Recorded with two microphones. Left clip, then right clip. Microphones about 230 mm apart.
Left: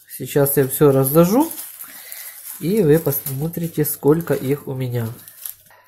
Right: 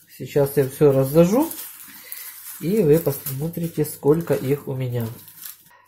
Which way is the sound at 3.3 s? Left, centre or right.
Centre.